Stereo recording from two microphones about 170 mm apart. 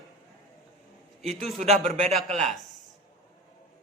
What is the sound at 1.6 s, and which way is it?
Speech, 40° right (ahead or behind).